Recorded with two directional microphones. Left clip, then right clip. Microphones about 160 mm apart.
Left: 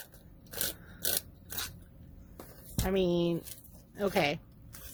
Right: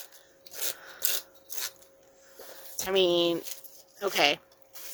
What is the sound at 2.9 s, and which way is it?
Speech, 30° right (ahead or behind).